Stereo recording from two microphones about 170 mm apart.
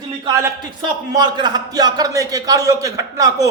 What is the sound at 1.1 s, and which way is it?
A man's voice, 25° right (ahead or behind).